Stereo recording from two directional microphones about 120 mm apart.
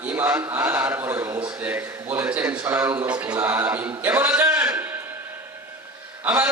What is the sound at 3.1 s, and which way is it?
Speech, 10° right (ahead or behind).